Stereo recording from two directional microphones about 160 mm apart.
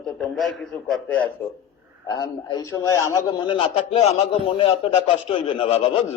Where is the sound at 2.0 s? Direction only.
25° left (ahead or behind).